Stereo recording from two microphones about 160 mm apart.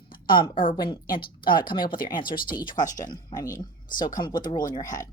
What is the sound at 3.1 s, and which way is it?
Speech, 25° left (ahead or behind).